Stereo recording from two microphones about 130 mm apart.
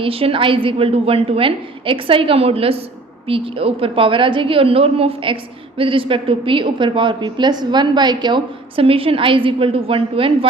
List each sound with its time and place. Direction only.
0.0 s a woman's voice: 45° right (ahead or behind)